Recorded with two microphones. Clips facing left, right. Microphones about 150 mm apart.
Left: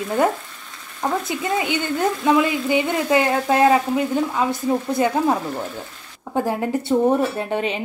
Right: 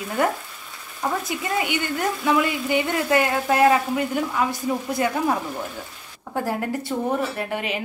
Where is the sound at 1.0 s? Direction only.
20° left (ahead or behind).